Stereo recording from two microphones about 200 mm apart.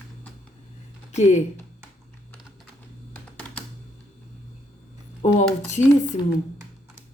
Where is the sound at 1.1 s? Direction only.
35° left (ahead or behind).